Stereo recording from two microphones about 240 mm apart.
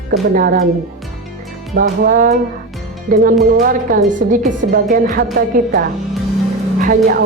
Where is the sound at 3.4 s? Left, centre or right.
Right.